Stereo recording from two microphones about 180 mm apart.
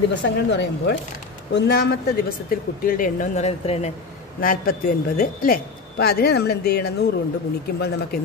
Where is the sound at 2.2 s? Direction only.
55° left (ahead or behind); by 3.9 s 35° left (ahead or behind).